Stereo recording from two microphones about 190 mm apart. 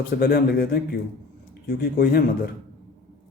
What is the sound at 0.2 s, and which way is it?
A man's voice, 55° left (ahead or behind).